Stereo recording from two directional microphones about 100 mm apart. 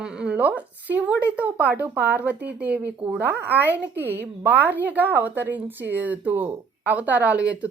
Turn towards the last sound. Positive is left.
turn(degrees=-15)  # may be behind; listen again after turning